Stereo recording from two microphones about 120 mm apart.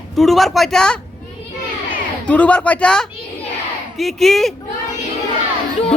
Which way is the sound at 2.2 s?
10° left (ahead or behind).